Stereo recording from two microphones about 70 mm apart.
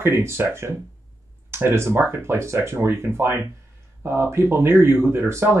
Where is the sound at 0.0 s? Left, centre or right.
Right.